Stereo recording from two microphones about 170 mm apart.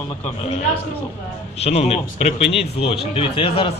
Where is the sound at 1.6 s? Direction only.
35° left (ahead or behind).